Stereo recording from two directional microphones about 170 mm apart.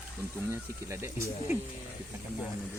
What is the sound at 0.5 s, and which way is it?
Speech, 15° right (ahead or behind).